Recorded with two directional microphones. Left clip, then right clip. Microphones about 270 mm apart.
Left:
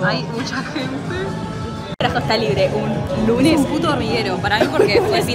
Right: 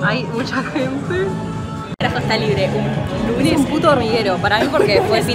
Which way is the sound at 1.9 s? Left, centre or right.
Left.